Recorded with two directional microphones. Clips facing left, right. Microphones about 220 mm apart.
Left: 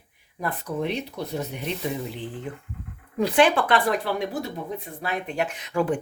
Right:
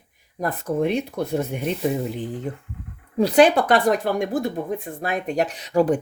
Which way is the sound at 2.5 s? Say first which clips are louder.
Right 3 dB; 40° right (ahead or behind).